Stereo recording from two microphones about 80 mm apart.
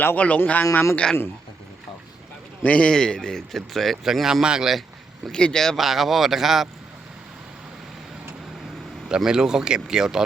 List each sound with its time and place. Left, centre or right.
0.0 s a man's voice: left
2.6 s a man's voice: centre
5.3 s a man's voice: centre
9.0 s speech: centre